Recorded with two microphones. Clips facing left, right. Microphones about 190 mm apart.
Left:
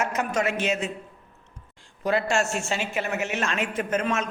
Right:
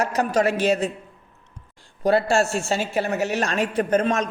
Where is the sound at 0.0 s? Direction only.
35° right (ahead or behind).